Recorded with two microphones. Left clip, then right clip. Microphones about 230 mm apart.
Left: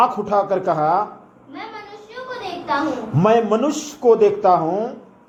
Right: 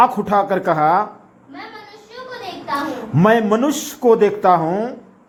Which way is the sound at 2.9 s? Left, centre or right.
Right.